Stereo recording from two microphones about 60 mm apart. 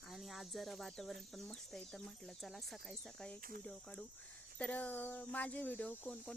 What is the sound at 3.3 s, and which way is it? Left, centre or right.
Speech, centre.